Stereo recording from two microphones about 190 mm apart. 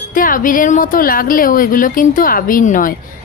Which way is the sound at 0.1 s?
45° left (ahead or behind).